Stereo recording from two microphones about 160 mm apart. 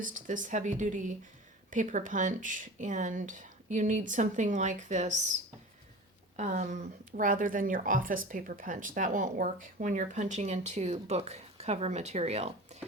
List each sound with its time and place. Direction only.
0.0 s speech: 55° right (ahead or behind)
6.3 s speech: 50° right (ahead or behind)